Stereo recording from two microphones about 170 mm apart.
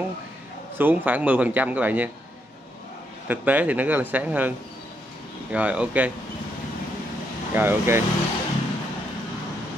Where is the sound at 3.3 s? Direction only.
10° right (ahead or behind).